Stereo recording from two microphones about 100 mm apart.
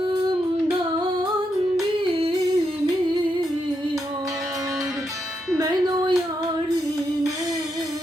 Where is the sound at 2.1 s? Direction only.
65° right (ahead or behind).